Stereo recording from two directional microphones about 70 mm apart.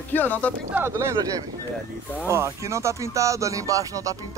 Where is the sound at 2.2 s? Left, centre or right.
Right.